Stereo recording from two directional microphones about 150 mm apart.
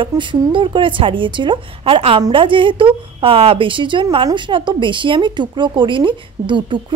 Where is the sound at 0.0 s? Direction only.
35° right (ahead or behind).